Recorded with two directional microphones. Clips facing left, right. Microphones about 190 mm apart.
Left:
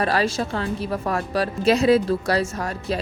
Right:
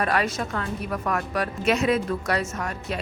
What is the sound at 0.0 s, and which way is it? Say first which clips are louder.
A woman's voice: left 3 dB; 30° left (ahead or behind).